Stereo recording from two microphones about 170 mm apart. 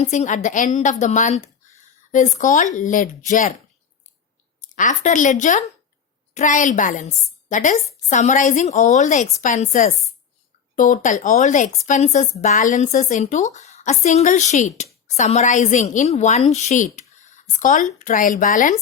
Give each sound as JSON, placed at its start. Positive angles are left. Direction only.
{"t": 0.0, "sound": "a woman's voice", "side_deg": 45}
{"t": 4.7, "sound": "a woman's voice", "side_deg": 50}